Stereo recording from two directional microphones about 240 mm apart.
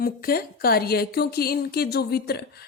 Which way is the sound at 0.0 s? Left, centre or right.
Left.